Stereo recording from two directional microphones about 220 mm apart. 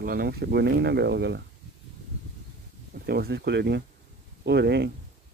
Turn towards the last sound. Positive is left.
turn(degrees=-50)  # may be behind; listen again after turning